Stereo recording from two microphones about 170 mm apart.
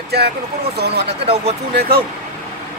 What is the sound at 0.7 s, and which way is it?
Speech, 70° right (ahead or behind).